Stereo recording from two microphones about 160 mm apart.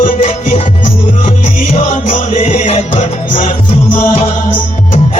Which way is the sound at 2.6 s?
40° left (ahead or behind).